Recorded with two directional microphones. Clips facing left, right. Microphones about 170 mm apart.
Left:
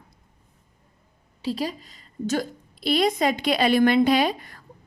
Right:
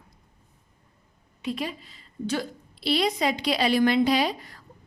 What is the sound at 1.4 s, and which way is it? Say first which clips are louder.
A woman's voice: left 3 dB; 35° left (ahead or behind).